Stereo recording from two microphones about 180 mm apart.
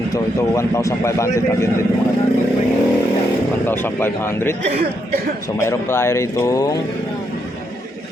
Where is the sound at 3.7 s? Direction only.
10° left (ahead or behind).